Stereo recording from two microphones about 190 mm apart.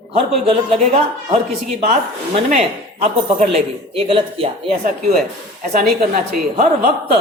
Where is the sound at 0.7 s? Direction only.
30° right (ahead or behind).